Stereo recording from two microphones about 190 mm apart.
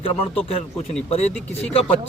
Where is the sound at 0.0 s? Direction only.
30° left (ahead or behind).